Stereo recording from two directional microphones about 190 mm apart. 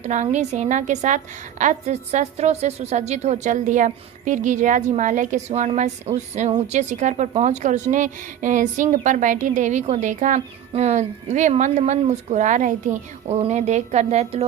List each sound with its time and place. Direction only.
0.0 s a woman's voice: 40° right (ahead or behind)